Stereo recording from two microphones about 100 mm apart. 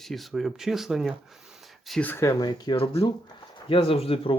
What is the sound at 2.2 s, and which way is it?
Speech, 45° left (ahead or behind).